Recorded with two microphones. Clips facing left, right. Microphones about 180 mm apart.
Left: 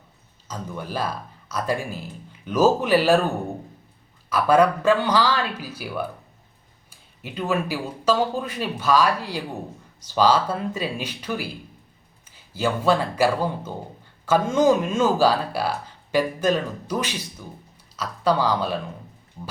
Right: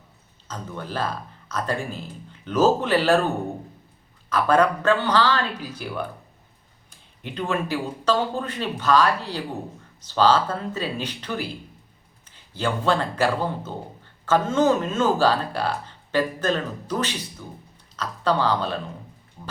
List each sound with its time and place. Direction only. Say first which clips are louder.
0.4 s speech: left 1 dB; 10° left (ahead or behind)
4.3 s speech: left 2 dB; 10° left (ahead or behind)